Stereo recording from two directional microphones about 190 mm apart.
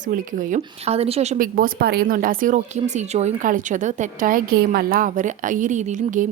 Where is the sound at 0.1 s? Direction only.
45° right (ahead or behind).